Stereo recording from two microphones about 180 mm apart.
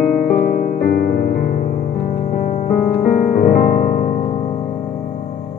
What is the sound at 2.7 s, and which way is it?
Music, 50° left (ahead or behind).